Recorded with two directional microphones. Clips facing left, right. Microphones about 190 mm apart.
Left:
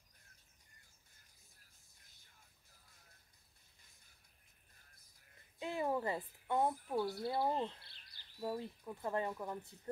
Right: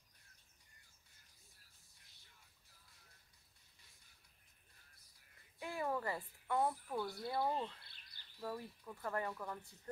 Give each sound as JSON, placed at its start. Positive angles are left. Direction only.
{"t": 5.6, "sound": "a woman's voice", "side_deg": 20}